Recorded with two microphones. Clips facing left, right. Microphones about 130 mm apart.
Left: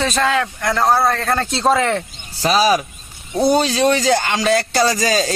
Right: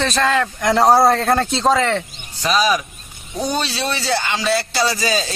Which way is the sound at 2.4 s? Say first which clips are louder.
Left 3 dB; 40° left (ahead or behind).